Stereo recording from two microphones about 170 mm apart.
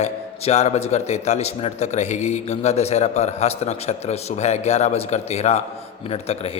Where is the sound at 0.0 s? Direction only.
40° left (ahead or behind).